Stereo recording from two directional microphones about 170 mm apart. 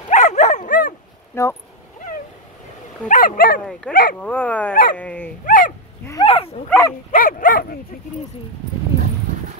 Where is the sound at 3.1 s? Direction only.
55° left (ahead or behind).